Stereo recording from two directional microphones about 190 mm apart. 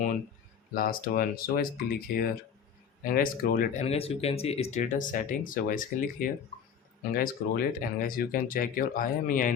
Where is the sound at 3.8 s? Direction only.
30° left (ahead or behind).